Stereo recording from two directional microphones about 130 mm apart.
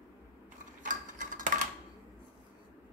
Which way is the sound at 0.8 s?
80° right.